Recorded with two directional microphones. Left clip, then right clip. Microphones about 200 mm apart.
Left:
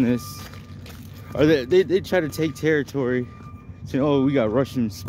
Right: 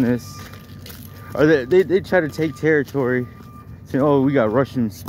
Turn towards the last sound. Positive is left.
turn(degrees=0)  # may be behind; listen again after turning